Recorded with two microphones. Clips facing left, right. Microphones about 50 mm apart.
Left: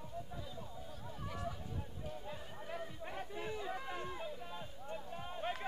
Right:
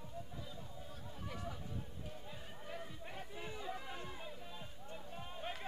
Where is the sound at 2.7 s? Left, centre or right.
Centre.